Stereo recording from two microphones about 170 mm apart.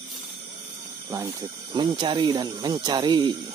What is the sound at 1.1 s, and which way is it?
Speech, 20° right (ahead or behind).